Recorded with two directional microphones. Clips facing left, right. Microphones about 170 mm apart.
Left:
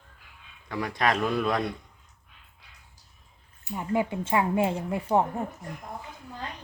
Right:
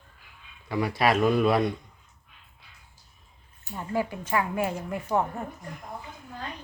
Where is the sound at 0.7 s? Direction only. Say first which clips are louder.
Right 3 dB; 5° right (ahead or behind).